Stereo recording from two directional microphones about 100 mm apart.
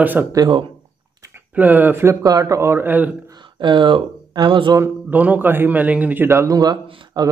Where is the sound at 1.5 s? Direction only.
20° right (ahead or behind).